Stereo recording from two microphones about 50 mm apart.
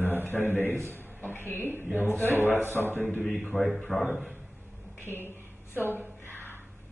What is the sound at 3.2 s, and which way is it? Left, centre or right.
Speech, centre.